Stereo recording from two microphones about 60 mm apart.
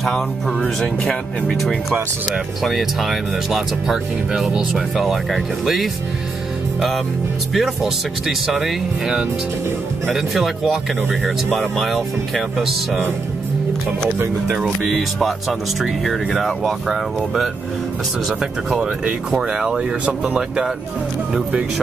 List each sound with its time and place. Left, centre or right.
0.0 s speech: centre
7.5 s speech: centre
14.5 s speech: centre
14.9 s speech: centre
19.3 s speech: centre